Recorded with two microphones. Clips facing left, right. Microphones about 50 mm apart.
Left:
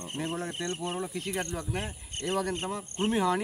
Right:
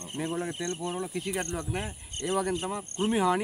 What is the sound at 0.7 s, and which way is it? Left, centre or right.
Speech, left.